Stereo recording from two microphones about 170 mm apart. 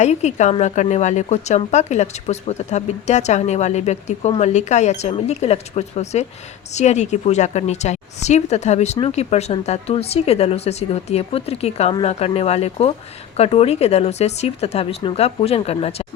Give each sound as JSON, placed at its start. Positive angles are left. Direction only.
{"t": 0.0, "sound": "a woman's voice", "side_deg": 40}